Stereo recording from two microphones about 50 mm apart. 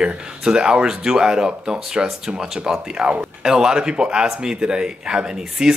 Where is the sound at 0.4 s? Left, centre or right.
Centre.